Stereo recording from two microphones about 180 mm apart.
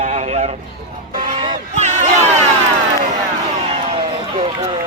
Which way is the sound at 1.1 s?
50° right (ahead or behind).